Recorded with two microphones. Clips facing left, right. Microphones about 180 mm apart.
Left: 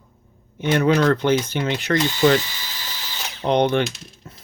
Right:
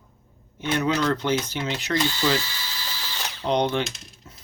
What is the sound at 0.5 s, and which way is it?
Speech, 60° left (ahead or behind).